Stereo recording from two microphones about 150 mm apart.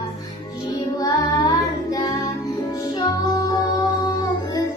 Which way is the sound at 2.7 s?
25° left (ahead or behind).